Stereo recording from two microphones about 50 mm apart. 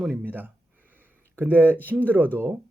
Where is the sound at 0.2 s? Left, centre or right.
Right.